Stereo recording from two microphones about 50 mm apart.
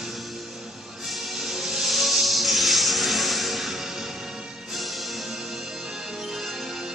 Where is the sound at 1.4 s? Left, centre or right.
Centre.